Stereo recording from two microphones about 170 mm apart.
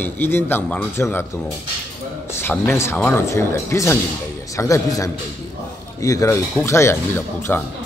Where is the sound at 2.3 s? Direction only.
15° left (ahead or behind).